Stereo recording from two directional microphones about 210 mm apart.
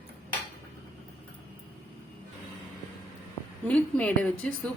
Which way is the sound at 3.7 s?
5° left (ahead or behind).